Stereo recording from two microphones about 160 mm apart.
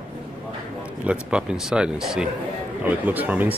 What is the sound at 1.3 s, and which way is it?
A man's voice, 5° right (ahead or behind).